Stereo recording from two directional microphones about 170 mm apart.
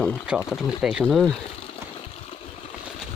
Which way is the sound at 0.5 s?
Centre (ahead or behind).